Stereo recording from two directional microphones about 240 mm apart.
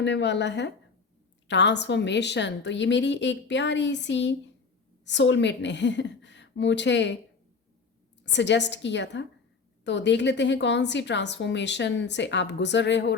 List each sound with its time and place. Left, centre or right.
0.0 s a woman's voice: left
8.2 s a woman's voice: left